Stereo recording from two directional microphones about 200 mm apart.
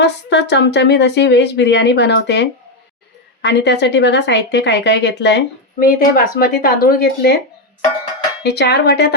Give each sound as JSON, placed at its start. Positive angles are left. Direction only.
{"t": 0.0, "sound": "a woman's voice", "side_deg": 60}
{"t": 8.4, "sound": "a woman's voice", "side_deg": 55}